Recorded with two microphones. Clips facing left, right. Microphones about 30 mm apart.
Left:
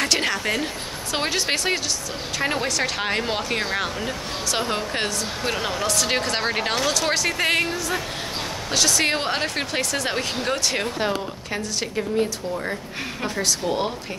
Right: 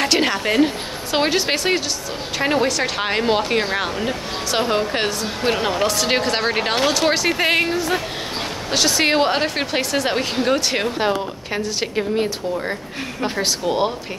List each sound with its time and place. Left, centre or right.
0.0 s a woman's voice: centre